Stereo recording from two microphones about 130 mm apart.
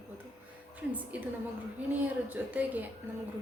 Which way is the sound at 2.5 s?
15° right (ahead or behind).